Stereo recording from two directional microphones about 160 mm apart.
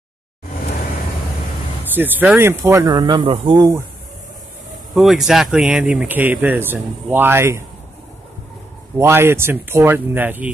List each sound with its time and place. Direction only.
2.0 s speech: 10° right (ahead or behind)
4.9 s speech: centre (ahead or behind)
8.9 s speech: 15° right (ahead or behind)